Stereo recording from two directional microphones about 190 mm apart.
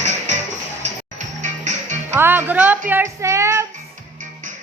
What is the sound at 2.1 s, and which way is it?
Speech, 10° right (ahead or behind).